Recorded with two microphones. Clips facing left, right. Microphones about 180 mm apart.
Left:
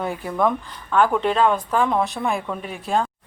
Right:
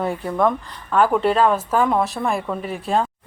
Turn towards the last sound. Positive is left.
turn(degrees=0)  # may be behind; listen again after turning